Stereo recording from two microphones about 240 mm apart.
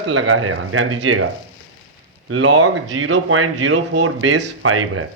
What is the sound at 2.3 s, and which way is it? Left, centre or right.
A man's voice, right.